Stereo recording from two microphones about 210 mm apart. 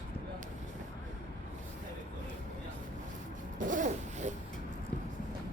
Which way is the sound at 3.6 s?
35° right (ahead or behind).